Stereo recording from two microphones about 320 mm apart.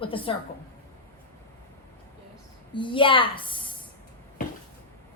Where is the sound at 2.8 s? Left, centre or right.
Centre.